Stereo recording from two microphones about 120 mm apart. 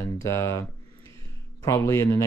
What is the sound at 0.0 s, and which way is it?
Speech, 25° left (ahead or behind).